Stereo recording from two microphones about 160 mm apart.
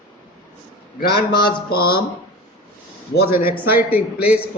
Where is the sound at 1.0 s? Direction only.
70° left (ahead or behind).